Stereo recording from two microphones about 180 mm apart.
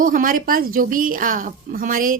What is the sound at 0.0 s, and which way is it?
A woman's voice, 50° right (ahead or behind).